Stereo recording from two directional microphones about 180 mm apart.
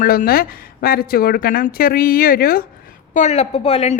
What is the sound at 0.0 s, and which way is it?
A woman's voice, 55° left (ahead or behind).